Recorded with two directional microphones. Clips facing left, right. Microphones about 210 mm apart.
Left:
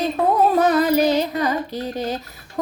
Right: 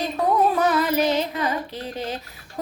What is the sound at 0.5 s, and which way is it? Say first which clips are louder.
A woman's voice: left 4 dB; 40° left (ahead or behind).